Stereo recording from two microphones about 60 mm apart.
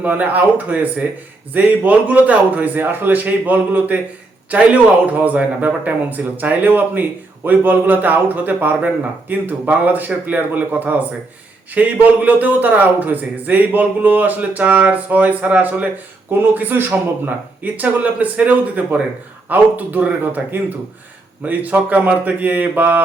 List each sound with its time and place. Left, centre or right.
0.0 s a man's voice: right